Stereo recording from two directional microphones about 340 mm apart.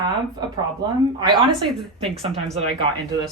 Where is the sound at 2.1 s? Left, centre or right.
Centre.